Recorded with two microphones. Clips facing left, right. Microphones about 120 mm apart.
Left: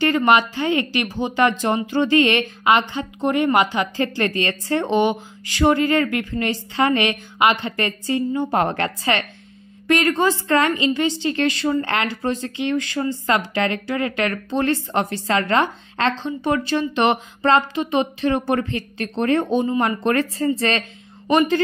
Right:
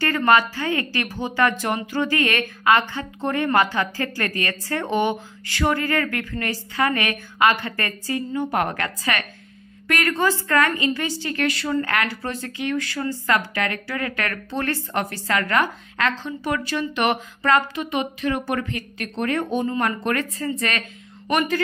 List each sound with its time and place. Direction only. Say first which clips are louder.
0.0 s a woman's voice: left 2 dB; 20° left (ahead or behind)
20.0 s a woman's voice: left 5 dB; 30° left (ahead or behind)